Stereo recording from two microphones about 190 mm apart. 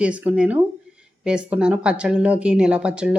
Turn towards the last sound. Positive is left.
turn(degrees=-5)  # may be behind; listen again after turning